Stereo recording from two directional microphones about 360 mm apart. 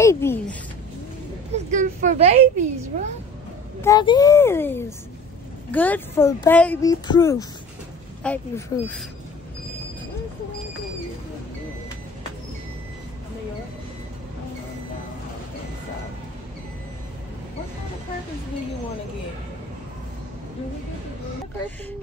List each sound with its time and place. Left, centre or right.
0.0 s speech: centre
1.5 s a woman's voice: right
3.8 s speech: centre